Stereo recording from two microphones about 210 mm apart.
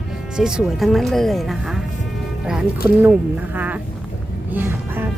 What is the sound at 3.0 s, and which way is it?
Speech, 10° right (ahead or behind).